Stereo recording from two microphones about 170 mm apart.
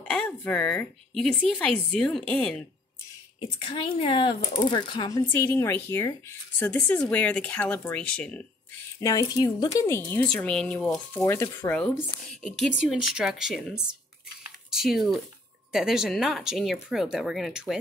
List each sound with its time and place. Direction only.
0.0 s speech: 5° left (ahead or behind)
3.3 s speech: 30° left (ahead or behind)
5.2 s speech: 10° left (ahead or behind)
9.0 s speech: 20° left (ahead or behind)
10.2 s speech: 5° left (ahead or behind)
11.2 s speech: 15° left (ahead or behind)
11.7 s speech: 5° left (ahead or behind)